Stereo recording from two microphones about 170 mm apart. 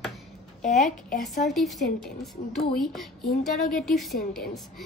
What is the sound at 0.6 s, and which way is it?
Speech, 45° left (ahead or behind).